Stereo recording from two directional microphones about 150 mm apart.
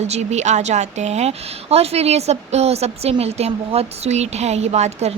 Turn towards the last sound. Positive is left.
turn(degrees=-45)  # may be behind; listen again after turning